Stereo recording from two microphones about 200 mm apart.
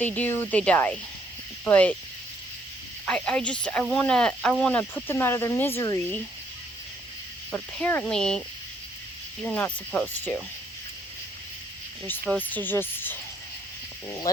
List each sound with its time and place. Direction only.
0.0 s speech: 10° left (ahead or behind)
3.1 s speech: 5° left (ahead or behind)
7.5 s speech: 10° left (ahead or behind)
9.4 s speech: 5° left (ahead or behind)
12.0 s speech: 10° left (ahead or behind)